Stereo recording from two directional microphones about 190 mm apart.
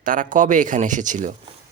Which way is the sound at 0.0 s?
45° right (ahead or behind).